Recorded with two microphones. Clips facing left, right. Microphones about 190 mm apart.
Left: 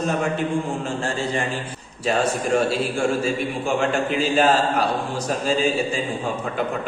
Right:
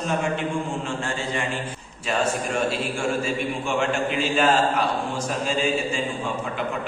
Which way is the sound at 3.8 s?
40° left (ahead or behind).